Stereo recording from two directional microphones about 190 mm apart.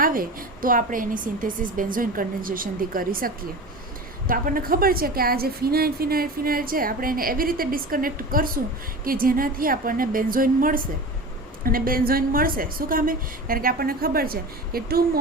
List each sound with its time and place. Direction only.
0.0 s a woman's voice: 50° right (ahead or behind)